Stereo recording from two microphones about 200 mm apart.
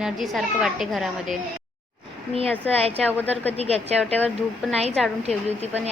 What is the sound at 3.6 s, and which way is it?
Speech, 30° right (ahead or behind).